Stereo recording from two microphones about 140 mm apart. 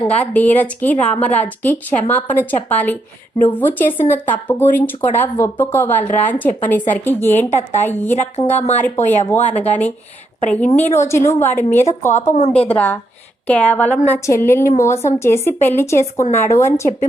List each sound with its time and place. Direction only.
0.1 s speech: 10° left (ahead or behind)
7.5 s a woman's voice: 55° left (ahead or behind)
7.9 s speech: 15° left (ahead or behind)
8.4 s a woman's voice: 55° left (ahead or behind)
9.0 s speech: 15° left (ahead or behind)
12.1 s speech: 55° left (ahead or behind)
12.5 s speech: 10° left (ahead or behind)